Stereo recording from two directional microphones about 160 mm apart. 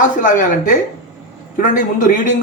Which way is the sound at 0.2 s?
50° left (ahead or behind).